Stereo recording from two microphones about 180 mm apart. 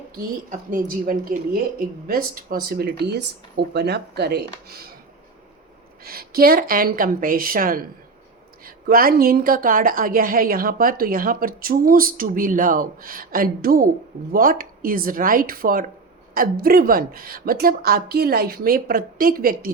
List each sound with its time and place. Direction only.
0.2 s a woman's voice: 50° right (ahead or behind)
6.0 s a woman's voice: 55° right (ahead or behind)